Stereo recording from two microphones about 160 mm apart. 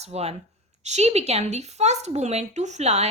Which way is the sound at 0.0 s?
40° right (ahead or behind).